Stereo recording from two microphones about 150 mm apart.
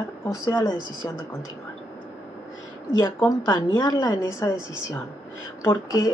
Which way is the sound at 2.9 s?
20° left (ahead or behind).